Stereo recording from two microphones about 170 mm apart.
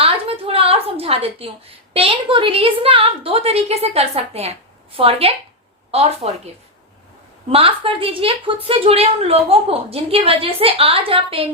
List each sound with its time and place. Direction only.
0.0 s a sound: 35° right (ahead or behind)
1.9 s a woman's voice: 35° right (ahead or behind)
7.5 s a woman's voice: 35° right (ahead or behind)